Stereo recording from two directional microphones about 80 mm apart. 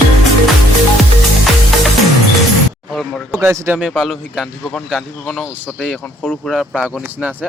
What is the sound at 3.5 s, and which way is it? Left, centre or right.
Speech, right.